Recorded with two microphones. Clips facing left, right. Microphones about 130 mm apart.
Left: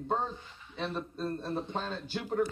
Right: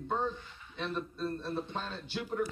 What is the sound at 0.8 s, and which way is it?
Speech, 30° left (ahead or behind).